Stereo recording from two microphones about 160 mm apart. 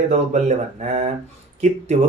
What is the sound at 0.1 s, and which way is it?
Speech, 45° right (ahead or behind).